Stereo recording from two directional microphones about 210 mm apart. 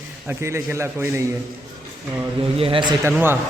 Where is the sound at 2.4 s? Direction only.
25° right (ahead or behind).